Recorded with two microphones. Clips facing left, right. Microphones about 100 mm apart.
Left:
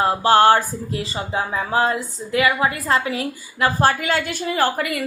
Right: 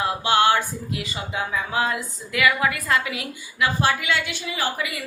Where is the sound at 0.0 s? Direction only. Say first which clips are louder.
Left 5 dB; 40° left (ahead or behind).